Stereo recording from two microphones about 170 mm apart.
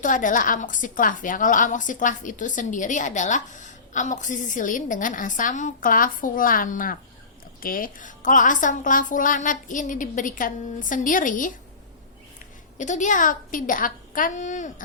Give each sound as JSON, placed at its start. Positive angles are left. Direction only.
{"t": 0.0, "sound": "a woman's voice", "side_deg": 50}
{"t": 12.8, "sound": "a woman's voice", "side_deg": 45}